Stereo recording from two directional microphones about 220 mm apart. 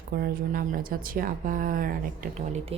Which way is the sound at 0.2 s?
40° right (ahead or behind).